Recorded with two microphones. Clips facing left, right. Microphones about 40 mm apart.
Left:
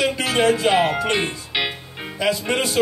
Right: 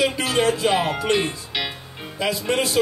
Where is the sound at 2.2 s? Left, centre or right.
Left.